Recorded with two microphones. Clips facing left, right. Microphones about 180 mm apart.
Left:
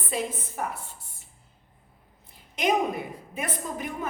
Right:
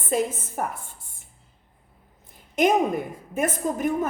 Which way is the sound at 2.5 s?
50° right (ahead or behind).